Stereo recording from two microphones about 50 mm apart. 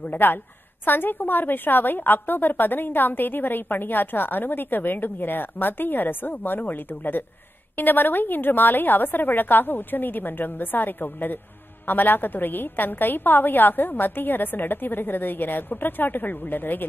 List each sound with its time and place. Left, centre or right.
0.0 s a woman's voice: left